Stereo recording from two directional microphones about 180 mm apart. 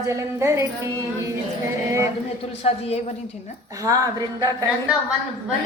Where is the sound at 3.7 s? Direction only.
20° right (ahead or behind).